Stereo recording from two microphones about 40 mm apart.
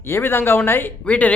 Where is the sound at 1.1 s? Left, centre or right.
Left.